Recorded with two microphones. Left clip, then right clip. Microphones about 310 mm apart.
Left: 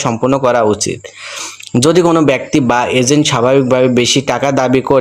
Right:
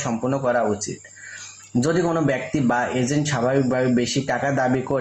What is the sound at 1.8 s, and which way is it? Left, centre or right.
Speech, left.